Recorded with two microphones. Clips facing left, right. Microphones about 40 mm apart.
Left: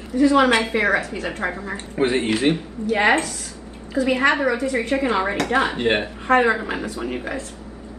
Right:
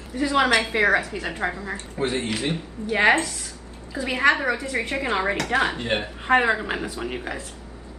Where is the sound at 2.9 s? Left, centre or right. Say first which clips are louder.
Left 1 dB; right.